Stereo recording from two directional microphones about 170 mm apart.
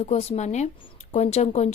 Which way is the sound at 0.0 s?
40° left (ahead or behind).